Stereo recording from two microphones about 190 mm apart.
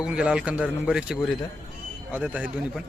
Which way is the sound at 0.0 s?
5° right (ahead or behind).